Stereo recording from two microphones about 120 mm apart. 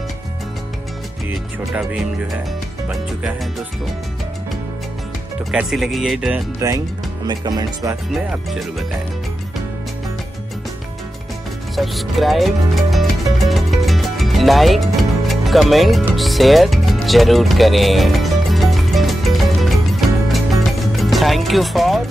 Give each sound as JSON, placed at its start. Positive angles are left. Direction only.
{"t": 1.8, "sound": "speech", "side_deg": -5}
{"t": 5.5, "sound": "speech", "side_deg": -5}
{"t": 7.2, "sound": "speech", "side_deg": -35}
{"t": 11.7, "sound": "music", "side_deg": 0}